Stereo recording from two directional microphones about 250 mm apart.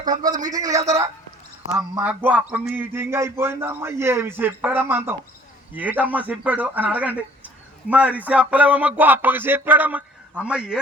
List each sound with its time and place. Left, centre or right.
0.0 s a man's voice: right
0.3 s a man's voice: centre